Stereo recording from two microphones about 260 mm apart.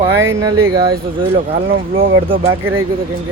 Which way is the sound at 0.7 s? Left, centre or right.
Right.